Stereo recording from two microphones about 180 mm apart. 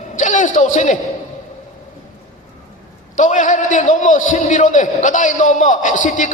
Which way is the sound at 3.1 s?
45° left (ahead or behind).